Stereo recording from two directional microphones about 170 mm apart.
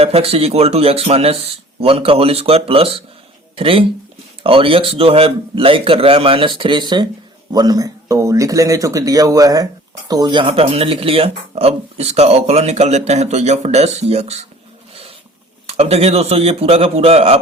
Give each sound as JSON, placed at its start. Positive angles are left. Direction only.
{"t": 0.0, "sound": "speech", "side_deg": -35}
{"t": 15.6, "sound": "speech", "side_deg": -40}